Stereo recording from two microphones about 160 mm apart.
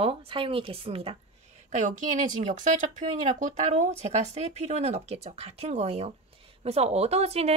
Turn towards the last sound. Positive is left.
turn(degrees=-40)  # may be behind; listen again after turning